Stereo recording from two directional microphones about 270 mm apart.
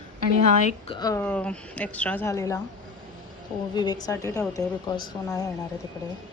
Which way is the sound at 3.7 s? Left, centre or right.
Centre.